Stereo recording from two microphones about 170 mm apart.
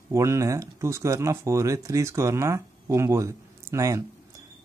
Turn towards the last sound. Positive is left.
turn(degrees=-20)  # may be behind; listen again after turning